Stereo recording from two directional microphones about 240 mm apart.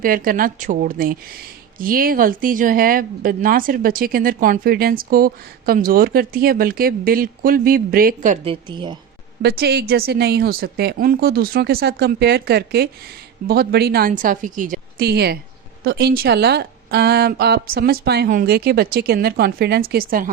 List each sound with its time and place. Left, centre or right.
0.0 s speech: right
8.6 s speech: centre
9.4 s speech: right